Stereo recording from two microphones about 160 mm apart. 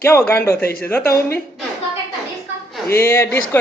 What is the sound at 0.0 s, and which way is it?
Speech, 15° left (ahead or behind).